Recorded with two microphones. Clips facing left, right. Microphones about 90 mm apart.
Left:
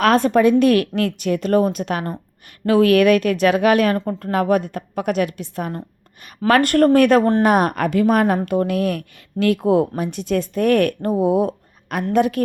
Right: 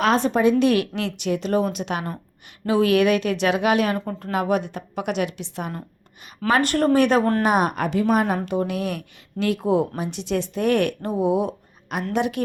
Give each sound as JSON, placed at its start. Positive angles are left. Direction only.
{"t": 0.0, "sound": "speech", "side_deg": 60}
{"t": 0.6, "sound": "a woman's voice", "side_deg": 50}
{"t": 3.9, "sound": "speech", "side_deg": 25}
{"t": 4.2, "sound": "a woman's voice", "side_deg": 50}
{"t": 11.3, "sound": "a sound", "side_deg": 45}
{"t": 12.1, "sound": "a woman's voice", "side_deg": 45}